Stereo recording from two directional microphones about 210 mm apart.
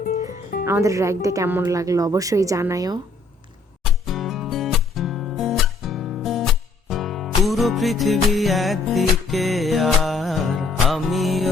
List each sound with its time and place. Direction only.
0.0 s music: 40° left (ahead or behind)
0.6 s speech: 15° right (ahead or behind)
4.0 s music: centre (ahead or behind)